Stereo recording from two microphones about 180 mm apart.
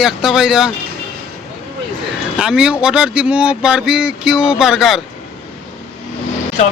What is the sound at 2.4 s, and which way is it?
Speech, 5° right (ahead or behind).